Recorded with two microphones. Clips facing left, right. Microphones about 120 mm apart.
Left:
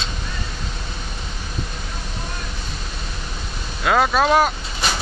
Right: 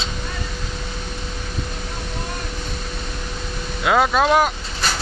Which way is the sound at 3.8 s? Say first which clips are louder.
Even; 10° right (ahead or behind).